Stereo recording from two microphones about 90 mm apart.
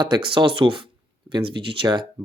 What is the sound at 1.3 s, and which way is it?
Speech, 55° right (ahead or behind).